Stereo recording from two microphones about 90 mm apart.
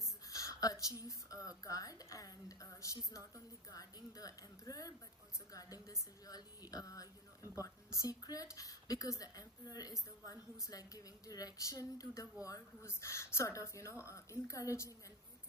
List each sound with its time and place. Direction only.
0.0 s a woman's voice: 35° left (ahead or behind)